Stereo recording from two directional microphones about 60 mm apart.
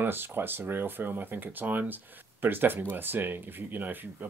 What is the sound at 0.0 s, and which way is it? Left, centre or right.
Speech, right.